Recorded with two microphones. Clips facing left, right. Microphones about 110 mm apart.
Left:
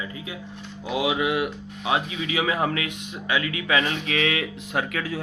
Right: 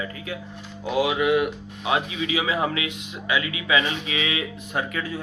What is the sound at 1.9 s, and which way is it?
Speech, 40° left (ahead or behind).